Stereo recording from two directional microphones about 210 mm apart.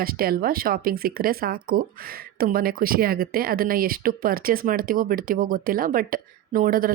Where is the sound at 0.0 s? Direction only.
45° right (ahead or behind).